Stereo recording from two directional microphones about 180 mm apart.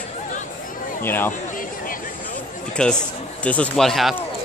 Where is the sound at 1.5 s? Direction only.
50° left (ahead or behind).